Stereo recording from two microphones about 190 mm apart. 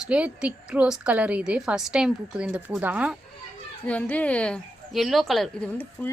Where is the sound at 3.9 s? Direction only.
5° left (ahead or behind).